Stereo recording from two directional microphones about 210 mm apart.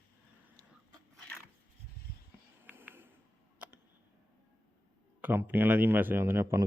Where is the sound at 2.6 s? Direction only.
10° right (ahead or behind).